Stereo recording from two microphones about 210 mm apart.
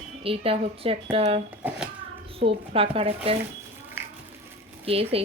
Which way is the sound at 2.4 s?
25° right (ahead or behind).